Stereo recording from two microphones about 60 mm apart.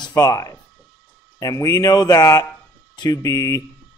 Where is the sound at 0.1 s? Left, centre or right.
Left.